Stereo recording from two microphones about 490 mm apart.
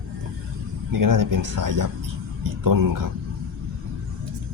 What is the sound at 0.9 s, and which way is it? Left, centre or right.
Speech, right.